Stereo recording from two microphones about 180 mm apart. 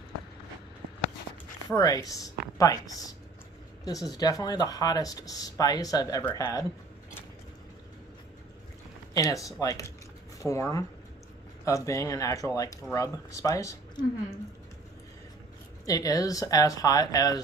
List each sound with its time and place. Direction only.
1.7 s speech: 20° left (ahead or behind)
9.1 s speech: 20° left (ahead or behind)
15.8 s speech: 20° left (ahead or behind)